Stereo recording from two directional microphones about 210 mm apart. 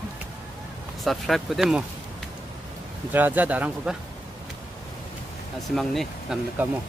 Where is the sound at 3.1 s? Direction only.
10° right (ahead or behind).